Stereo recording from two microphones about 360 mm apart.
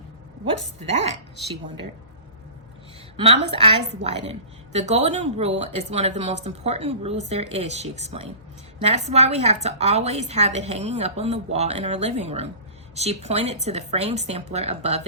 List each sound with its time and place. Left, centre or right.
3.2 s a woman's voice: centre